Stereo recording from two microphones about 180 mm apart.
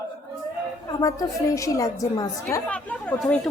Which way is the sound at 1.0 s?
20° left (ahead or behind).